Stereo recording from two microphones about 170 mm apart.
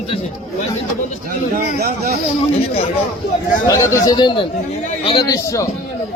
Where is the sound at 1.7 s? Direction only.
65° right (ahead or behind).